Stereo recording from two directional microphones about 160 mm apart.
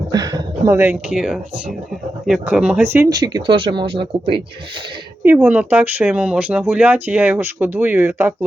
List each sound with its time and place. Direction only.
0.1 s a sound: 25° right (ahead or behind)
1.1 s speech: 5° right (ahead or behind)
2.9 s speech: 20° right (ahead or behind)
5.2 s speech: 15° right (ahead or behind)